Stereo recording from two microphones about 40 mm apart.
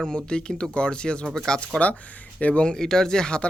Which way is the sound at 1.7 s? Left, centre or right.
Left.